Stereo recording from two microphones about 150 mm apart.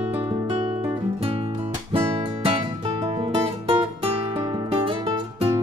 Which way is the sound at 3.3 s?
40° right (ahead or behind).